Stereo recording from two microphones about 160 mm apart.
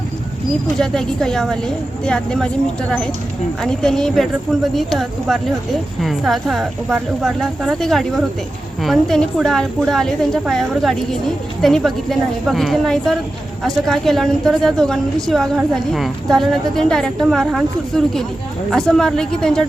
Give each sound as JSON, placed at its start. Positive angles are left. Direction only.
{"t": 0.8, "sound": "speech", "side_deg": 5}
{"t": 3.6, "sound": "speech", "side_deg": 5}